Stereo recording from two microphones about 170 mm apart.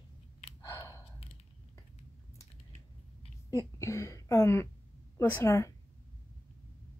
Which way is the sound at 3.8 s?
15° left (ahead or behind).